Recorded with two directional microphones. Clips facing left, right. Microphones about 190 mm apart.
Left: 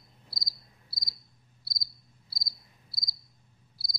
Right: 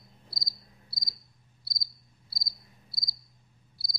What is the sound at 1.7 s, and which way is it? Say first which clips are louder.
Cricket: even; centre (ahead or behind).